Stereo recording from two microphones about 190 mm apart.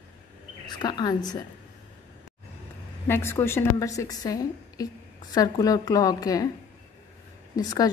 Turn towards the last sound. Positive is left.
turn(degrees=20)  # may be behind; listen again after turning